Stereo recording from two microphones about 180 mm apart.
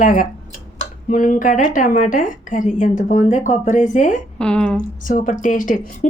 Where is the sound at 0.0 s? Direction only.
45° left (ahead or behind).